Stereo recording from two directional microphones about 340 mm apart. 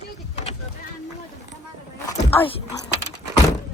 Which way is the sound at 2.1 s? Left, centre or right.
Centre.